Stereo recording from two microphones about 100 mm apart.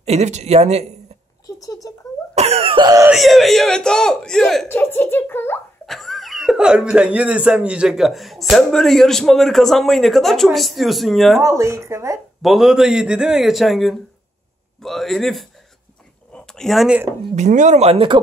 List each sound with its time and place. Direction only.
0.0 s speech: 90° right
1.6 s speech: 35° left (ahead or behind)
2.3 s cough: 90° right
3.1 s speech: centre (ahead or behind)
4.6 s a child's voice: 25° left (ahead or behind)
5.9 s speech: centre (ahead or behind)
11.4 s speech: 30° right (ahead or behind)
12.4 s speech: centre (ahead or behind)
16.3 s a sound: 5° left (ahead or behind)
17.7 s speech: 80° right; by 18.2 s 60° right (ahead or behind)